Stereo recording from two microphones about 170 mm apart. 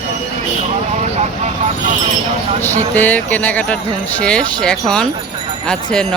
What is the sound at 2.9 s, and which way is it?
Speech, 10° left (ahead or behind).